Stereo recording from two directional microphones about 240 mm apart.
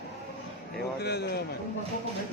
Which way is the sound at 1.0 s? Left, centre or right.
Left.